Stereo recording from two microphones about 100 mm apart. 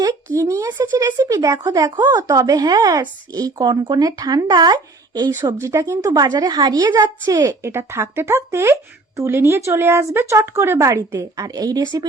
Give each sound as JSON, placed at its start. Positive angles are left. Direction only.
{"t": 0.0, "sound": "speech", "side_deg": -30}
{"t": 5.5, "sound": "a woman's voice", "side_deg": -30}